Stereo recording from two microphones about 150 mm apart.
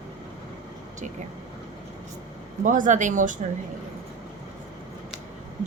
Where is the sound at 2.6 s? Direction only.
55° right (ahead or behind).